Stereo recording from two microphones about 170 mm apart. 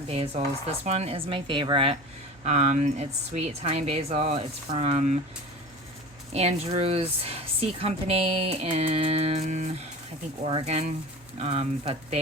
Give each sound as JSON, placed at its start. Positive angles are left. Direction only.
{"t": 0.1, "sound": "speech", "side_deg": -35}
{"t": 6.3, "sound": "speech", "side_deg": -40}